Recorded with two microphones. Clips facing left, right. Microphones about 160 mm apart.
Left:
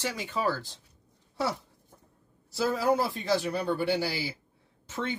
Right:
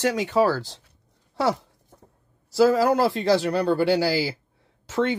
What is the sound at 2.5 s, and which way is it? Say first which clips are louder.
Speech: right 8 dB; 90° right.